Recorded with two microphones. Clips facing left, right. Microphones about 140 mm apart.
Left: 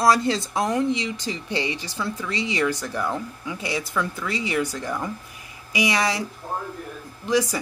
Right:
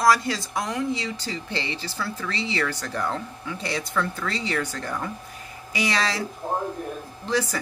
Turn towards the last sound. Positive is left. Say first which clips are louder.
# left 3 dB
turn(degrees=15)  # may be behind; listen again after turning